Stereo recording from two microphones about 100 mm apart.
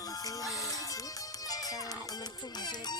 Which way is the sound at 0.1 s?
35° left (ahead or behind).